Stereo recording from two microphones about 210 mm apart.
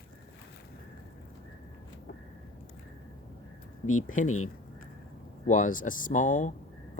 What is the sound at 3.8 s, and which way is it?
Speech, 90° left.